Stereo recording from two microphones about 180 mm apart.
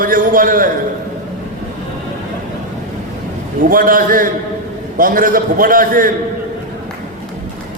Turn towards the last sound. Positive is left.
turn(degrees=-50)  # may be behind; listen again after turning